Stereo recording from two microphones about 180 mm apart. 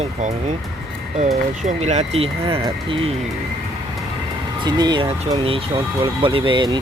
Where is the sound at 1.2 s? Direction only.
40° right (ahead or behind).